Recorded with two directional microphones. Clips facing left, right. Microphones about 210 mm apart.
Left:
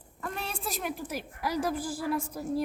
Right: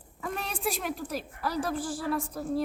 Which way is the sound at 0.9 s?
15° left (ahead or behind).